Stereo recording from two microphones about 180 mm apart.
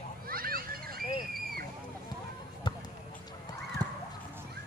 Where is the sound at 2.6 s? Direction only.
25° left (ahead or behind).